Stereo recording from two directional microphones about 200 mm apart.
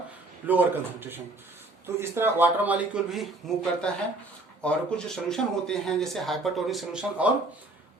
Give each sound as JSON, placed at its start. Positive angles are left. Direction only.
{"t": 0.4, "sound": "a man's voice", "side_deg": -10}